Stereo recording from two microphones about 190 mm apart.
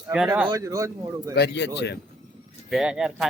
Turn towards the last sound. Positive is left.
turn(degrees=-5)  # may be behind; listen again after turning